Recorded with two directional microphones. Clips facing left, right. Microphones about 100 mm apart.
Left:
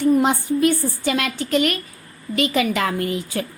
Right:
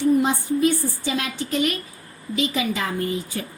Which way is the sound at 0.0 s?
70° left (ahead or behind).